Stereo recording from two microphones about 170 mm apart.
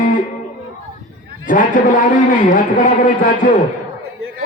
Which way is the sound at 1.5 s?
50° left (ahead or behind).